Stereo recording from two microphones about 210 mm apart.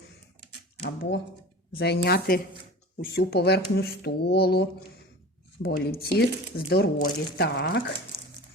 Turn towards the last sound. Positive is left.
turn(degrees=50)  # may be behind; listen again after turning